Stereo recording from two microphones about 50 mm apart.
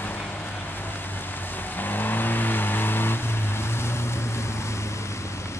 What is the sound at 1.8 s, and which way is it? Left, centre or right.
Vehicle, left.